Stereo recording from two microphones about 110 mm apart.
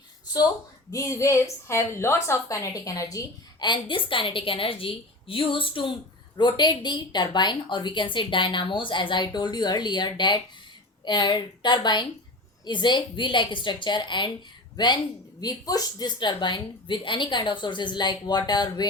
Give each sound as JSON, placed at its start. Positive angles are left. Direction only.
{"t": 0.9, "sound": "a woman's voice", "side_deg": 30}
{"t": 3.6, "sound": "a woman's voice", "side_deg": 45}
{"t": 15.4, "sound": "a woman's voice", "side_deg": 35}